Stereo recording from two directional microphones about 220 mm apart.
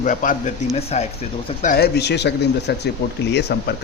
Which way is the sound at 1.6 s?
45° left (ahead or behind).